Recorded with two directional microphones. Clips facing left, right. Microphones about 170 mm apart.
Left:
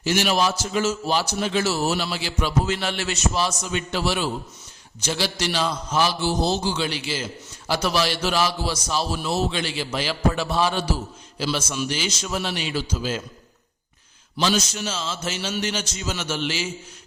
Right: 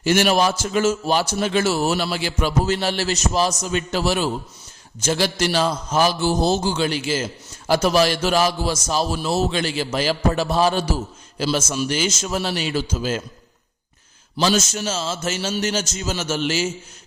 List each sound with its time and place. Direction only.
0.0 s a man's voice: 50° right (ahead or behind)
14.3 s a man's voice: 45° right (ahead or behind)